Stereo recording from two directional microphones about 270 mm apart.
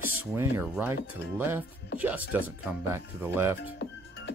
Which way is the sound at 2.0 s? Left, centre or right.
Centre.